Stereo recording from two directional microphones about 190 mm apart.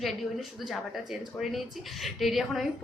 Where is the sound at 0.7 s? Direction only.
Centre (ahead or behind).